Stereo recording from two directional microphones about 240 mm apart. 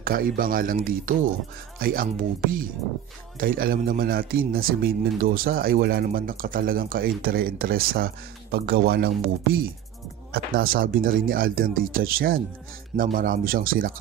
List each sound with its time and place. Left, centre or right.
0.0 s a man's voice: right